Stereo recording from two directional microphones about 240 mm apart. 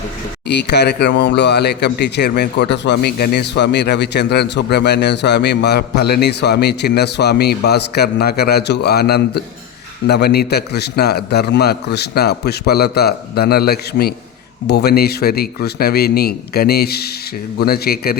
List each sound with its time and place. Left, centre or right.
0.4 s a man's voice: left